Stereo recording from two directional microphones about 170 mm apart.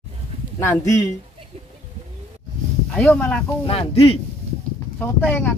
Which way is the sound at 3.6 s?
35° left (ahead or behind).